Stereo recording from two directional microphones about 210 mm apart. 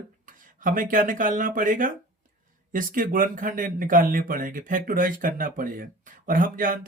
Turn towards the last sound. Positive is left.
turn(degrees=-40)  # may be behind; listen again after turning